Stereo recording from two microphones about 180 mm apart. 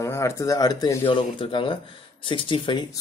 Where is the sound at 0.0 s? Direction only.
15° left (ahead or behind).